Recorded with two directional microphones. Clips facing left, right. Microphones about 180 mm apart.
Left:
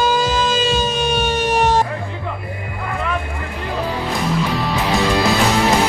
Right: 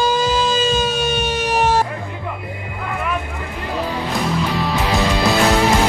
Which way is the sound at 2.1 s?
15° right (ahead or behind).